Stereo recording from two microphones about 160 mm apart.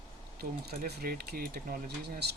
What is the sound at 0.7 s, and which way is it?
Speech, 80° right.